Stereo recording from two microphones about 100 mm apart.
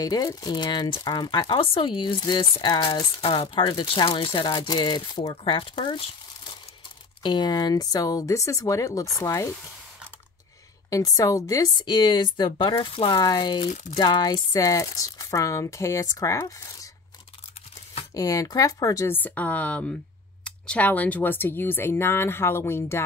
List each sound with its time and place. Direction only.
0.0 s speech: 40° left (ahead or behind)
3.3 s speech: 55° left (ahead or behind)
4.5 s speech: 45° left (ahead or behind)
5.3 s speech: 60° left (ahead or behind)
7.2 s speech: 50° left (ahead or behind); by 9.6 s 30° left (ahead or behind)
10.9 s speech: 40° left (ahead or behind)
11.8 s speech: 50° left (ahead or behind); by 16.9 s 35° left (ahead or behind)
18.1 s speech: 35° left (ahead or behind)
19.1 s speech: 15° left (ahead or behind)